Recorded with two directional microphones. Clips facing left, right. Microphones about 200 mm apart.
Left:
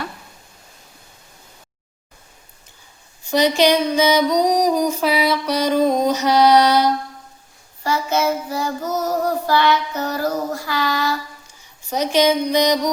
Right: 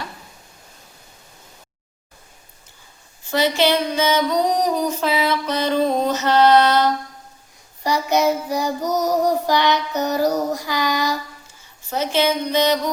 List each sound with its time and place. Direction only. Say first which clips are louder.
3.2 s music: left 3 dB; 15° left (ahead or behind)
7.9 s child singing: right 1 dB; 15° right (ahead or behind)
11.9 s music: left 3 dB; 15° left (ahead or behind)